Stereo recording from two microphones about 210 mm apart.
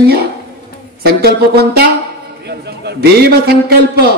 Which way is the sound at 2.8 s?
50° right (ahead or behind).